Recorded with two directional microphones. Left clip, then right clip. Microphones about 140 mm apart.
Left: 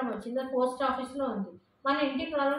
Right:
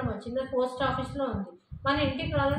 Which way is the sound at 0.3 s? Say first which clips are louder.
Right 1 dB; 5° right (ahead or behind).